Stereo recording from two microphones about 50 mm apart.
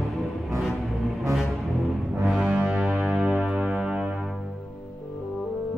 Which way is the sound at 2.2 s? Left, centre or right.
Centre.